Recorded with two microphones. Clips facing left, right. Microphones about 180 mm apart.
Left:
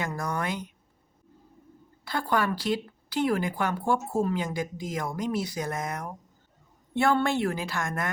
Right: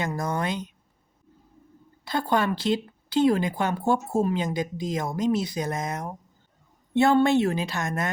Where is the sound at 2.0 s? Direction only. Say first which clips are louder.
Right 3 dB; 20° right (ahead or behind).